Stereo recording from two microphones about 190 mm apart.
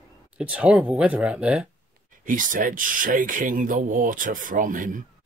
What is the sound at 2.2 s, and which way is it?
Speech, 45° right (ahead or behind).